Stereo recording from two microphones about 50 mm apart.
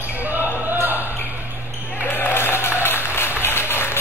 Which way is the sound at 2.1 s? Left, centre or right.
Left.